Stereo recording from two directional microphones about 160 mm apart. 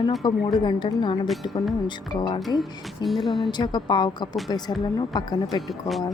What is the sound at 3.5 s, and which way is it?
A woman's voice, 25° left (ahead or behind).